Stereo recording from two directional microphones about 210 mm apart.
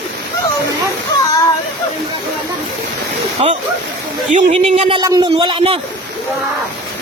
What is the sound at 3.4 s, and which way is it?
Speech, 25° right (ahead or behind).